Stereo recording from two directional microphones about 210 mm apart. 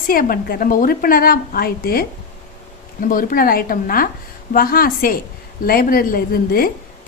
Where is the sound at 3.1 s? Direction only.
40° left (ahead or behind).